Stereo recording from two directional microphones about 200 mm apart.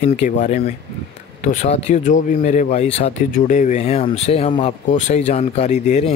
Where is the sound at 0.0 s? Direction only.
35° left (ahead or behind).